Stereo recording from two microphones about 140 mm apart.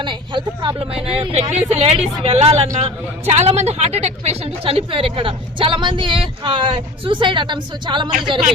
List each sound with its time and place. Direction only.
0.0 s a woman's voice: 35° right (ahead or behind)